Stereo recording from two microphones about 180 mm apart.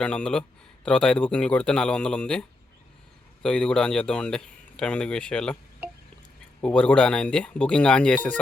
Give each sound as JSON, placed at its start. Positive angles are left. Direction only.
{"t": 0.0, "sound": "speech", "side_deg": 5}
{"t": 6.6, "sound": "speech", "side_deg": 5}